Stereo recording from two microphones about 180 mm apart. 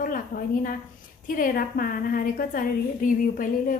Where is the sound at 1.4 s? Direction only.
50° left (ahead or behind).